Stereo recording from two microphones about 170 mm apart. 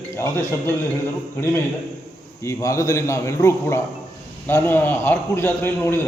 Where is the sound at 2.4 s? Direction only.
15° left (ahead or behind).